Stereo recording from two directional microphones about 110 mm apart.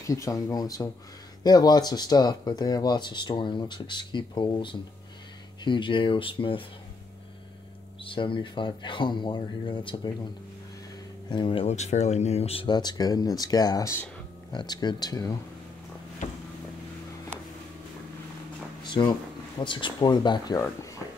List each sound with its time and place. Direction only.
0.0 s speech: 30° left (ahead or behind); by 6.6 s 50° left (ahead or behind)
8.0 s speech: 50° left (ahead or behind)
11.2 s speech: 50° left (ahead or behind)
11.6 s speech: 90° left; by 12.6 s 65° left (ahead or behind)
12.6 s speech: 40° left (ahead or behind)
14.5 s speech: 40° left (ahead or behind)
19.6 s speech: 45° left (ahead or behind)